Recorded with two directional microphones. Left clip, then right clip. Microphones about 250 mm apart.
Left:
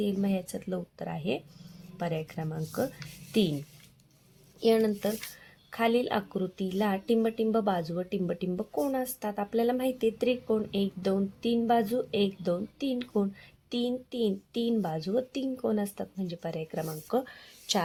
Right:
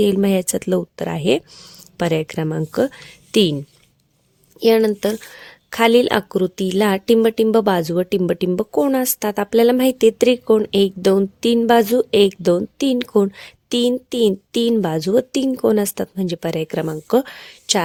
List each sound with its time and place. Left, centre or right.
0.0 s a woman's voice: right
4.6 s a woman's voice: right